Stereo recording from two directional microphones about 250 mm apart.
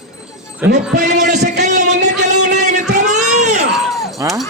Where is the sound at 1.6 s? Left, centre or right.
Right.